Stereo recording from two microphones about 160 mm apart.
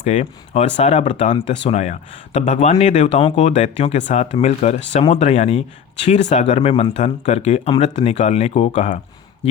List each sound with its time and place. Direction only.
0.0 s speech: 45° left (ahead or behind)